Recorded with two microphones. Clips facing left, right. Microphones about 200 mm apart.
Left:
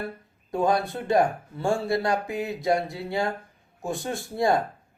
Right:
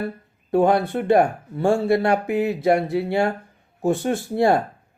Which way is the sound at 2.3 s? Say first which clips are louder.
Right 6 dB; 60° right (ahead or behind).